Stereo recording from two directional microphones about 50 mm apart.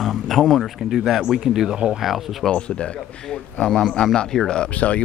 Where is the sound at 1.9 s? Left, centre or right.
Centre.